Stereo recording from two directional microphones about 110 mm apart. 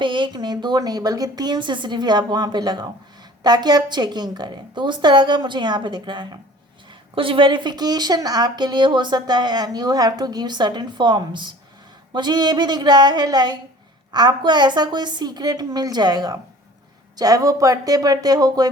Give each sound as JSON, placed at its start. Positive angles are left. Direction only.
{"t": 0.0, "sound": "a woman's voice", "side_deg": -45}